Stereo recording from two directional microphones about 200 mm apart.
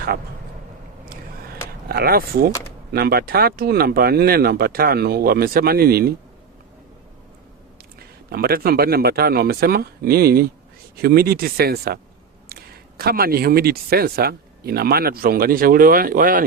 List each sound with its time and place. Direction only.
1.9 s speech: 50° right (ahead or behind)
8.3 s speech: 50° right (ahead or behind)